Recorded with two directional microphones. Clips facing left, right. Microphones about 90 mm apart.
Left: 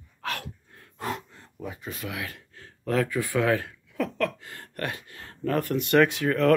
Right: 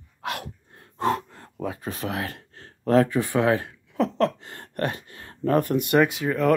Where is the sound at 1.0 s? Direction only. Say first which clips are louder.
Right 8 dB; 45° right (ahead or behind).